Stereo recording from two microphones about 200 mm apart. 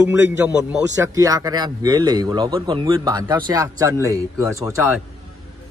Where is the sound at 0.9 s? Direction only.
20° right (ahead or behind).